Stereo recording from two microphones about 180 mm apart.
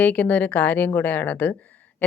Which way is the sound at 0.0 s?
5° left (ahead or behind).